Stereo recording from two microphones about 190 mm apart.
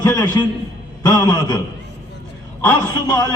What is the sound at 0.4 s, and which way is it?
A man's voice, 20° left (ahead or behind).